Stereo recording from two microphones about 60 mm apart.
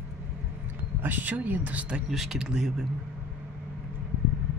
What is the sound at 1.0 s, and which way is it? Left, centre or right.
Speech, right.